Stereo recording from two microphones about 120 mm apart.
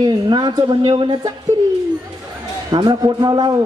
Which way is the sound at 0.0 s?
40° right (ahead or behind).